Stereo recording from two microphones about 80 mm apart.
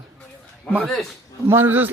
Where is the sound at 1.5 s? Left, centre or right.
Right.